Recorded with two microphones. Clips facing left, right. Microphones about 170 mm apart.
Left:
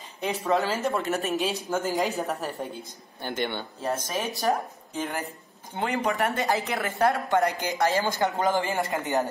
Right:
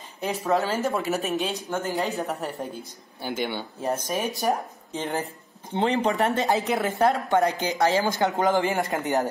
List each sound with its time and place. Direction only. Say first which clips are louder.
0.2 s speech: right 1 dB; centre (ahead or behind)
1.8 s speech: left 1 dB; 15° left (ahead or behind)
2.1 s speech: right 1 dB; centre (ahead or behind); by 9.2 s 20° right (ahead or behind)